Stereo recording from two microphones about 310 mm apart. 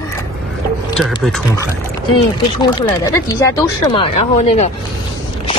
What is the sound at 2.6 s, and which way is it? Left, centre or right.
Speech, centre.